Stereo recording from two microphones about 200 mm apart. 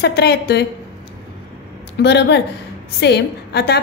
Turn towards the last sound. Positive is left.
turn(degrees=55)  # may be behind; listen again after turning